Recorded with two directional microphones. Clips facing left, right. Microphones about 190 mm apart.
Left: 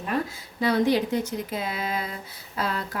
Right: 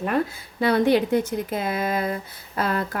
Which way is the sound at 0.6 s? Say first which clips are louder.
Right 3 dB; 60° right (ahead or behind).